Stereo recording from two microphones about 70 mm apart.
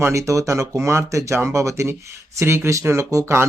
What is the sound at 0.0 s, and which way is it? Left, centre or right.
Speech, right.